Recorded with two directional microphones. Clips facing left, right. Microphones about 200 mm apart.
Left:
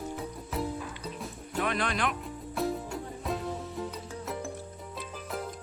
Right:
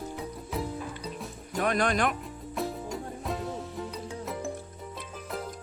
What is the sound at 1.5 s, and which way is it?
Speech, 45° right (ahead or behind).